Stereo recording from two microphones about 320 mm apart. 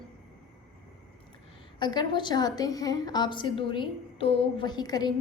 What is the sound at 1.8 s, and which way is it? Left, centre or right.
A woman's voice, centre.